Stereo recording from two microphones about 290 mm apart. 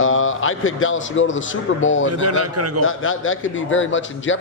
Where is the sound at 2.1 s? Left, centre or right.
Right.